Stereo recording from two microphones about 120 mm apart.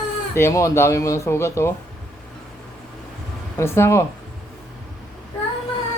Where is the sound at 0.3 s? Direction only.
25° left (ahead or behind).